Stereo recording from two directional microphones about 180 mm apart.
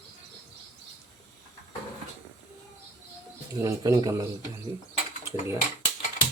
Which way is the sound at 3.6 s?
20° right (ahead or behind).